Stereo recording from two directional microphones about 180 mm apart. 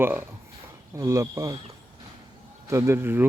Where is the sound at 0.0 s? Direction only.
10° right (ahead or behind).